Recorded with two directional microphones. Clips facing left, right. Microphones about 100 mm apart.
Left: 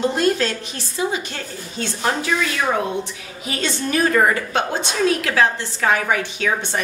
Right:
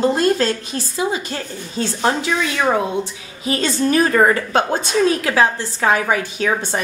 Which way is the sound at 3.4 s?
35° right (ahead or behind).